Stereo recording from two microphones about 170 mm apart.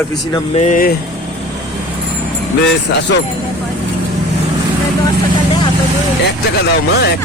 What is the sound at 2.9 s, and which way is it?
Speech, 90° left.